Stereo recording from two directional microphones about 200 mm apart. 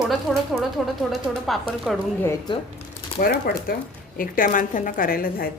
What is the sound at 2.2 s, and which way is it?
Speech, 20° left (ahead or behind).